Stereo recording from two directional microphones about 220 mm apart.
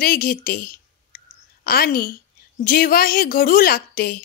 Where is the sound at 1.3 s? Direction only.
45° left (ahead or behind).